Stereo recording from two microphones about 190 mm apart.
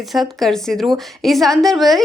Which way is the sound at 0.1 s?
Centre (ahead or behind).